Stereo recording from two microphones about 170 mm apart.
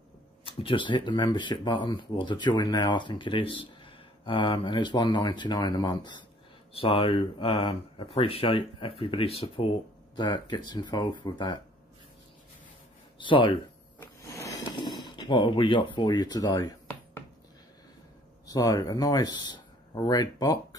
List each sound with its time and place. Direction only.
0.5 s speech: 30° left (ahead or behind)
13.2 s speech: 30° left (ahead or behind)
13.9 s a sound: 15° left (ahead or behind)
15.0 s speech: 25° left (ahead or behind)
18.5 s speech: 20° left (ahead or behind)